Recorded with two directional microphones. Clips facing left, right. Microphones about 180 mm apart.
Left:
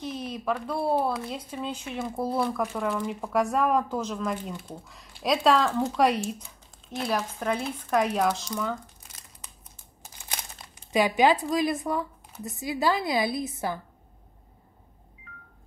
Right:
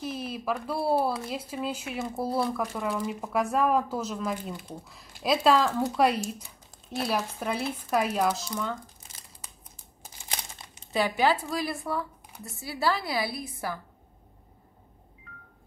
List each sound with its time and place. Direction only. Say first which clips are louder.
0.0 s speech: left 1 dB; 5° right (ahead or behind)
10.9 s a woman's voice: left 3 dB; 15° left (ahead or behind)